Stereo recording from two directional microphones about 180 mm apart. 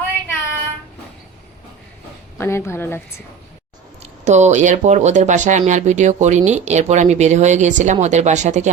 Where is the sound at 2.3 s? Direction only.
15° left (ahead or behind).